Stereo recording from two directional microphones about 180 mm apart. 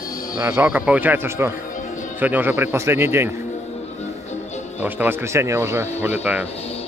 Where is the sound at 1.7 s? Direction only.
45° left (ahead or behind).